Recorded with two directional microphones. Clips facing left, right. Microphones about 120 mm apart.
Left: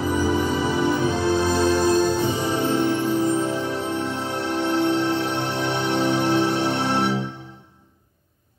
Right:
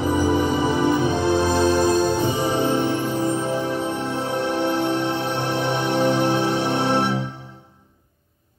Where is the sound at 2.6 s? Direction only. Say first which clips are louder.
Even; 15° right (ahead or behind).